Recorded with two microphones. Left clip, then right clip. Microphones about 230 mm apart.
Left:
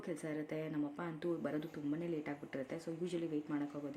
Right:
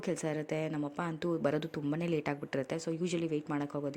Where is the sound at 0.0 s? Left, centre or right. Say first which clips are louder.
Right 7 dB; right.